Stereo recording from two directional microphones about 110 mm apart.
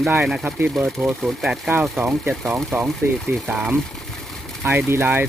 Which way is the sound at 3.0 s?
20° right (ahead or behind).